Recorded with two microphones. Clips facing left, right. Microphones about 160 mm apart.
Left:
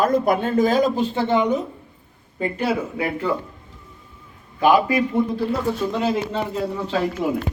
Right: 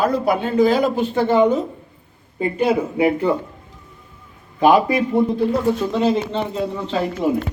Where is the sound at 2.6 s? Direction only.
20° right (ahead or behind).